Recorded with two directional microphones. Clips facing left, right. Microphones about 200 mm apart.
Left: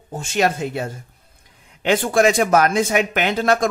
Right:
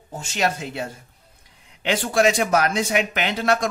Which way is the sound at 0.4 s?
50° left (ahead or behind).